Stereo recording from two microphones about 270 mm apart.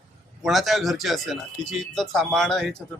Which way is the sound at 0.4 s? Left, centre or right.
Centre.